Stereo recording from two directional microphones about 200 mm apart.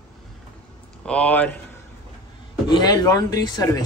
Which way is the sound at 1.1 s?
5° left (ahead or behind).